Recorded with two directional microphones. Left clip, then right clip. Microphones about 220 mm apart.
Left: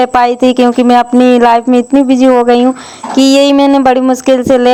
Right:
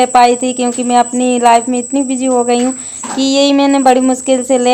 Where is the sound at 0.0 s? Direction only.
30° left (ahead or behind).